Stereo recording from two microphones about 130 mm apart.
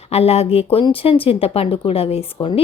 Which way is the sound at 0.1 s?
50° left (ahead or behind).